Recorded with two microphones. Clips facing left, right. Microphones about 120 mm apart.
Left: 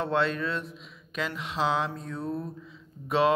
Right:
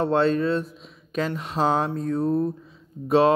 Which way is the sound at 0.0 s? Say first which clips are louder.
Right 7 dB; 40° right (ahead or behind).